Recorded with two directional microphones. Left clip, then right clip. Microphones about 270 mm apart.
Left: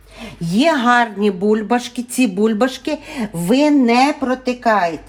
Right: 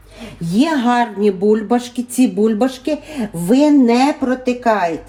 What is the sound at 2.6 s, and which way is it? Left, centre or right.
Speech, centre.